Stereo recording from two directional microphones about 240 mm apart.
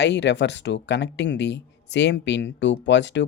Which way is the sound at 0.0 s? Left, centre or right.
Left.